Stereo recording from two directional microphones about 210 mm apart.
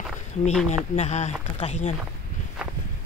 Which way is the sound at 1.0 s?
30° left (ahead or behind).